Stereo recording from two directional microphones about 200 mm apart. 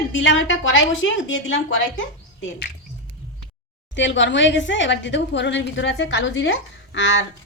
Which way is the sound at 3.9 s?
65° left (ahead or behind).